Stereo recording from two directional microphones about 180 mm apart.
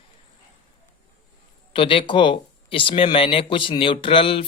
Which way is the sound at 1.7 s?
30° left (ahead or behind).